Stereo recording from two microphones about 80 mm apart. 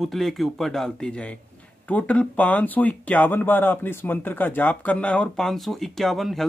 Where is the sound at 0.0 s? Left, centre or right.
Centre.